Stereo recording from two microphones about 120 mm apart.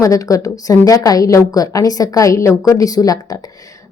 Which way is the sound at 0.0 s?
30° left (ahead or behind).